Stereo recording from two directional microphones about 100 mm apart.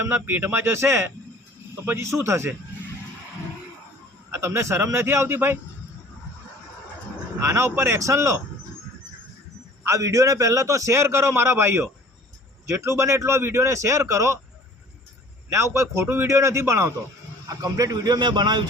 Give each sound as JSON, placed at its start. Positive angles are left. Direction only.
{"t": 0.0, "sound": "a man's voice", "side_deg": -20}
{"t": 4.3, "sound": "a man's voice", "side_deg": -30}
{"t": 7.4, "sound": "a man's voice", "side_deg": -30}
{"t": 9.8, "sound": "a man's voice", "side_deg": -30}
{"t": 15.4, "sound": "a man's voice", "side_deg": -25}